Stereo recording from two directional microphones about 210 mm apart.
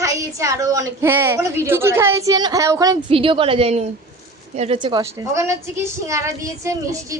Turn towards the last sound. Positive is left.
turn(degrees=-15)  # may be behind; listen again after turning